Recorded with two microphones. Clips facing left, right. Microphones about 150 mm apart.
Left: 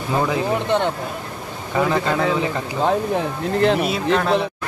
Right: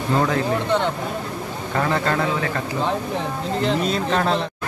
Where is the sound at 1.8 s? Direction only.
15° left (ahead or behind).